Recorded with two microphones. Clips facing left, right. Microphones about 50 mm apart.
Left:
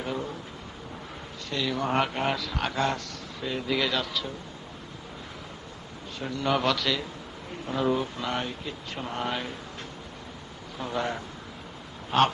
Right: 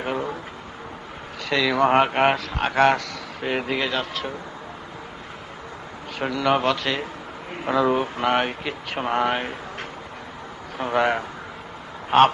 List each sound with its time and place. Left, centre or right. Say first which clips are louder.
0.0 s a sound: right 6 dB; right
1.4 s speech: right 10 dB; right
2.3 s speech: right 5 dB; right
2.7 s speech: right 13 dB; right
3.7 s speech: right 2 dB; right
6.1 s a man's voice: right 7 dB; right
6.6 s speech: right 3 dB; right
7.5 s speech: right 6 dB; right
7.9 s speech: right 8 dB; right
9.3 s speech: right 6 dB; right
10.8 s speech: right 9 dB; right